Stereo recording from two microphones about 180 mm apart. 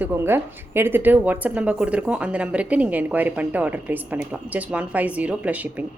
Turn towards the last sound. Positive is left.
turn(degrees=-10)  # may be behind; listen again after turning